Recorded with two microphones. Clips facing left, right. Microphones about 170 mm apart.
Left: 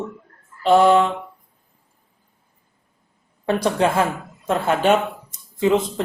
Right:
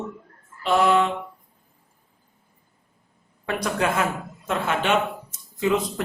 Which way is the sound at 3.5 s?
30° left (ahead or behind).